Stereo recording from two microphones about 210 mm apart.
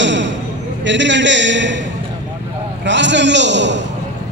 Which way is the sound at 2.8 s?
60° right (ahead or behind).